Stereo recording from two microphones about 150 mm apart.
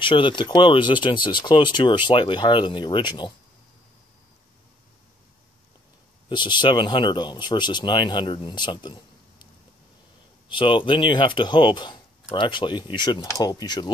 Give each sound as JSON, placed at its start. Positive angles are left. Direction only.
{"t": 0.0, "sound": "speech", "side_deg": 35}
{"t": 6.2, "sound": "speech", "side_deg": 30}
{"t": 10.5, "sound": "speech", "side_deg": 35}